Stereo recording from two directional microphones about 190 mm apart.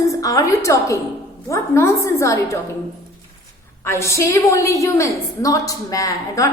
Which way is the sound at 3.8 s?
15° left (ahead or behind).